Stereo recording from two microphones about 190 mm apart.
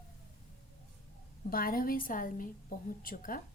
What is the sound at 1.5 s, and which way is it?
Speech, 50° left (ahead or behind).